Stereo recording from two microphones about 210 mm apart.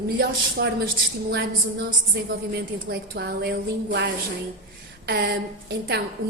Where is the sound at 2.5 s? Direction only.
50° right (ahead or behind).